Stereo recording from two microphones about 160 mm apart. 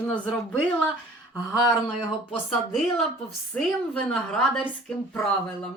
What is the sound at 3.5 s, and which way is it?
Speech, 5° left (ahead or behind).